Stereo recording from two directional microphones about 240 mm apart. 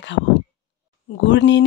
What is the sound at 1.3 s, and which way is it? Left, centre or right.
Speech, left.